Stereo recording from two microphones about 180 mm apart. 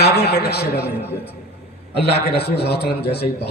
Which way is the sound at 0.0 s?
65° left (ahead or behind).